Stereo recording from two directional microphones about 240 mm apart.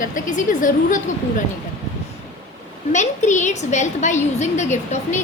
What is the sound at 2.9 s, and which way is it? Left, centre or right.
A woman's voice, left.